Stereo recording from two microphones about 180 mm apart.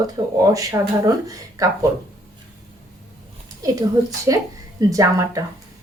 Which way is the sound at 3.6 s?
20° right (ahead or behind).